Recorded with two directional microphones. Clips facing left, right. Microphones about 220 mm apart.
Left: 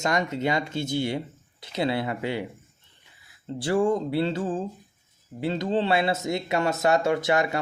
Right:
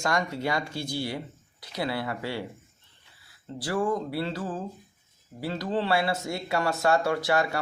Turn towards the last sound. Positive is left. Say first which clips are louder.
# left 2 dB
turn(degrees=20)  # may be behind; listen again after turning